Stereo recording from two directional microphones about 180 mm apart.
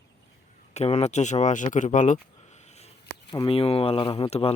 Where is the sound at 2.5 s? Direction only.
40° left (ahead or behind).